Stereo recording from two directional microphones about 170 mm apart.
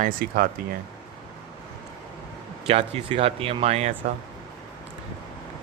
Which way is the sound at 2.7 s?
40° right (ahead or behind).